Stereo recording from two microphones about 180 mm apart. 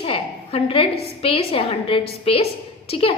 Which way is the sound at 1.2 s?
30° left (ahead or behind).